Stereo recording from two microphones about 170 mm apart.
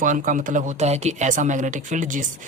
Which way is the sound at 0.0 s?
50° right (ahead or behind).